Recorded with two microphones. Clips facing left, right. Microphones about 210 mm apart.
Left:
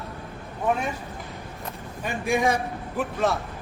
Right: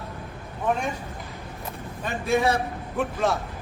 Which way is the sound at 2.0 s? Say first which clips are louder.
Right 1 dB; 15° left (ahead or behind).